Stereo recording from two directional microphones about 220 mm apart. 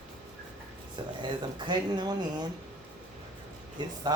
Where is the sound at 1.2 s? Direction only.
20° right (ahead or behind).